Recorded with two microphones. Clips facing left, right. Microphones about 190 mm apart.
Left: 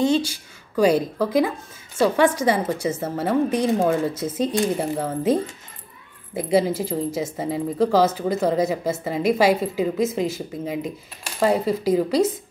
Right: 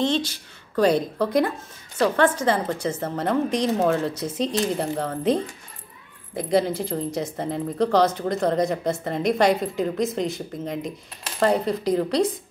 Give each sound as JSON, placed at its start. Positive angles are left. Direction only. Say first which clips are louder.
{"t": 0.0, "sound": "a woman's voice", "louder": "left 3 dB", "side_deg": 10}